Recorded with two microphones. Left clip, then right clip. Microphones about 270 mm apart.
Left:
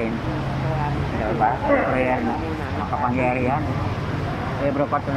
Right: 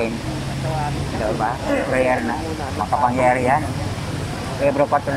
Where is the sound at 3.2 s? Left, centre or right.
Right.